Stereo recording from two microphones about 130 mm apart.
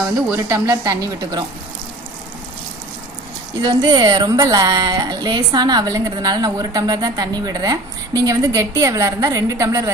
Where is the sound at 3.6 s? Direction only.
35° right (ahead or behind).